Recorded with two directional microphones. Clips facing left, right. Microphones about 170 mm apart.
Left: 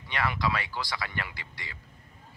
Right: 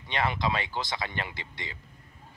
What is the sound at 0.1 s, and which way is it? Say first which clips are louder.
Speech: right 1 dB; 20° right (ahead or behind).